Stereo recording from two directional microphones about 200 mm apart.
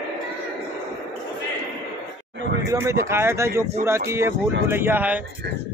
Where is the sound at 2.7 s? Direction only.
15° right (ahead or behind).